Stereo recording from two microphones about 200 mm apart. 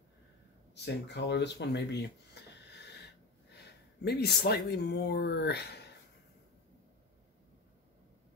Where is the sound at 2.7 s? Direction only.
55° left (ahead or behind).